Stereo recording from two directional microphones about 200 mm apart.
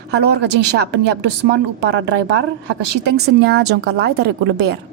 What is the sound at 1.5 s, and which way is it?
Speech, 60° right (ahead or behind).